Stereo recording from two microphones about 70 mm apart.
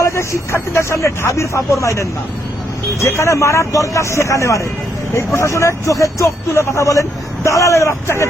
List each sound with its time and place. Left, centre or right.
0.0 s speech: left